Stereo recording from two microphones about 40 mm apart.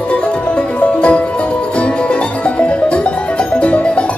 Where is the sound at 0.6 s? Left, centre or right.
Left.